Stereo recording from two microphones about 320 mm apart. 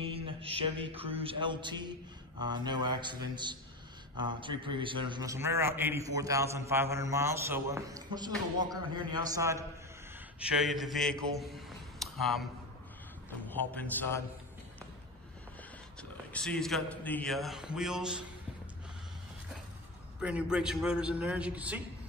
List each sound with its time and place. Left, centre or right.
0.0 s mantra: centre
2.4 s a man's voice: centre
13.5 s a man's voice: centre
16.0 s a man's voice: centre
20.2 s a man's voice: centre